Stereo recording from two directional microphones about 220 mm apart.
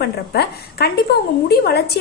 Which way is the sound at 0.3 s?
45° left (ahead or behind).